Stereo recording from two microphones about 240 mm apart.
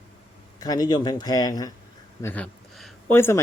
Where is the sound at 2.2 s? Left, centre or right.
Centre.